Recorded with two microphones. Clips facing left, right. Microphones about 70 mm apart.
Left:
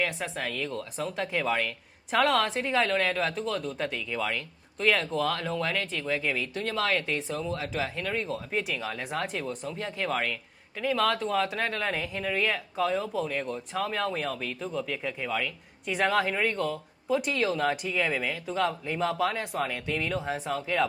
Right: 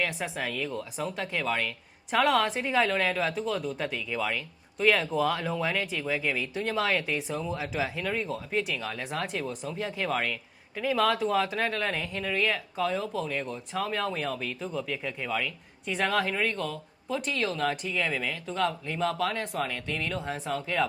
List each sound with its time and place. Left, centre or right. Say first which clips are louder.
0.0 s speech: even; centre